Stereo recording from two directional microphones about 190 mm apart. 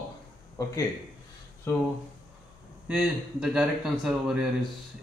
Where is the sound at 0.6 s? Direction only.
20° left (ahead or behind).